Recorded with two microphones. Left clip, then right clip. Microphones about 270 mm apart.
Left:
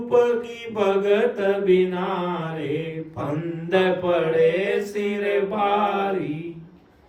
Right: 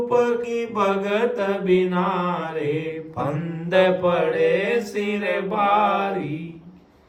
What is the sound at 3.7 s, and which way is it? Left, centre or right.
Speech, centre.